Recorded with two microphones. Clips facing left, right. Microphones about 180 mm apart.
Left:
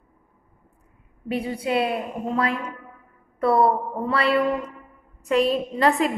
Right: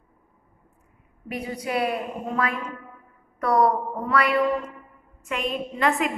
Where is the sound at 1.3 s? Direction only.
30° left (ahead or behind).